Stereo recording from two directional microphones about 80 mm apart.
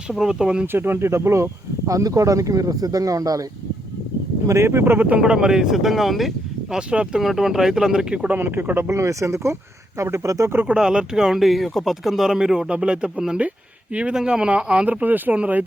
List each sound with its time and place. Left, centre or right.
0.1 s speech: centre
0.7 s speech: right
4.4 s speech: right; by 8.3 s centre
8.3 s speech: right
10.5 s speech: right
10.8 s speech: centre